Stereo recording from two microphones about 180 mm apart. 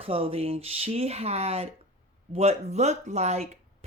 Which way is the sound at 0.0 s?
30° right (ahead or behind).